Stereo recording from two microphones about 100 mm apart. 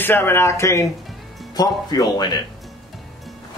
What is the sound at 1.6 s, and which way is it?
Speech, 40° left (ahead or behind).